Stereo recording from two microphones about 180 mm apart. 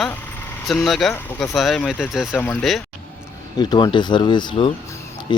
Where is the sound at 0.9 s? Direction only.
Centre (ahead or behind).